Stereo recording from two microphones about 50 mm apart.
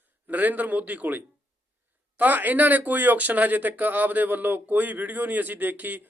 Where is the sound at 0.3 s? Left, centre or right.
Right.